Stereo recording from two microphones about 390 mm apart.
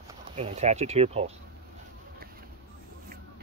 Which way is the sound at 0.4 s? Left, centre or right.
Centre.